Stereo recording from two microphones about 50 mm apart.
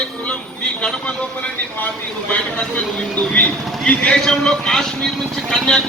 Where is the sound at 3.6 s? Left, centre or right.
Centre.